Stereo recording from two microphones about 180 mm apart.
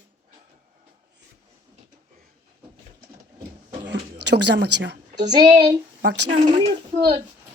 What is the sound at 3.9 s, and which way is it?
Speech, 70° right (ahead or behind).